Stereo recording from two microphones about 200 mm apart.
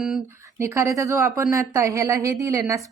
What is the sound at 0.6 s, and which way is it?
Speech, 15° right (ahead or behind).